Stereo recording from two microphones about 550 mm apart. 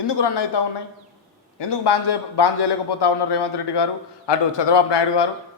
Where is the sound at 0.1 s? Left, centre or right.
Left.